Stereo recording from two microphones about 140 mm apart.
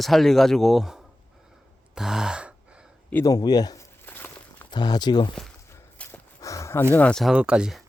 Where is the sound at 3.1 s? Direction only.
25° left (ahead or behind).